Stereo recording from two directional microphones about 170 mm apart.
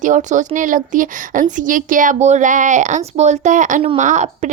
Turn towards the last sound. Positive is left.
turn(degrees=-45)  # may be behind; listen again after turning